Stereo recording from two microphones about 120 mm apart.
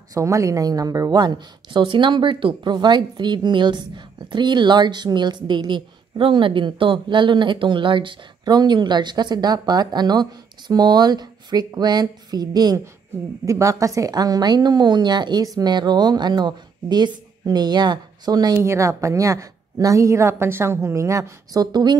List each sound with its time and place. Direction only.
0.1 s a woman's voice: 25° right (ahead or behind)
18.6 s a woman's voice: 25° right (ahead or behind)